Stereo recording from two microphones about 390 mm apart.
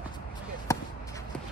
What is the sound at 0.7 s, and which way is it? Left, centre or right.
Basketball bounce, centre.